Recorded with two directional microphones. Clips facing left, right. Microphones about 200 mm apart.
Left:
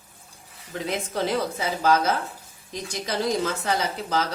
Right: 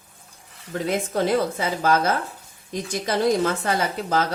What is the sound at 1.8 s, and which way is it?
A woman's voice, 50° right (ahead or behind).